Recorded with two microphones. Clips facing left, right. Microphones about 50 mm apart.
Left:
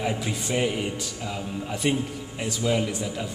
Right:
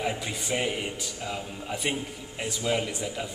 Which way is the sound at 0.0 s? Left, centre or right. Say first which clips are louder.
Left 3 dB; centre.